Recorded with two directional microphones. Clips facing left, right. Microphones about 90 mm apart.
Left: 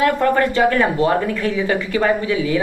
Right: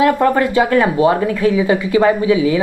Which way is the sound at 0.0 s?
15° right (ahead or behind).